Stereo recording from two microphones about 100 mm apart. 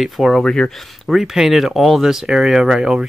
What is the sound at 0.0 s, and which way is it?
Speech, centre (ahead or behind).